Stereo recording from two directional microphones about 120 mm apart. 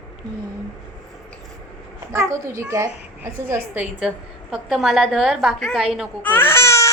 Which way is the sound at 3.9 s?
5° right (ahead or behind).